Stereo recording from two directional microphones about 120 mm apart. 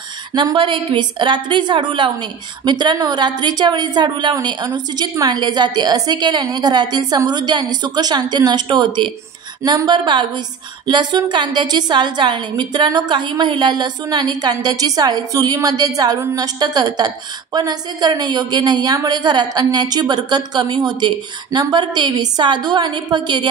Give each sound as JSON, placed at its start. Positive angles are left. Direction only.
{"t": 0.3, "sound": "a woman's voice", "side_deg": -30}
{"t": 0.6, "sound": "a woman's voice", "side_deg": -40}
{"t": 9.6, "sound": "a woman's voice", "side_deg": -25}
{"t": 9.8, "sound": "a woman's voice", "side_deg": -40}